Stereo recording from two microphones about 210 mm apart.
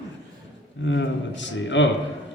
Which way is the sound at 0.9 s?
60° left (ahead or behind).